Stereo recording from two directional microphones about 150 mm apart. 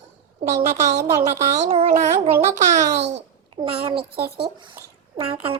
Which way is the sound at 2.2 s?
65° right (ahead or behind).